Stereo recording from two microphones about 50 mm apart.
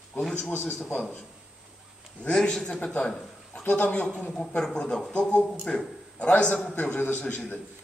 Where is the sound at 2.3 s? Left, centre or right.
Centre.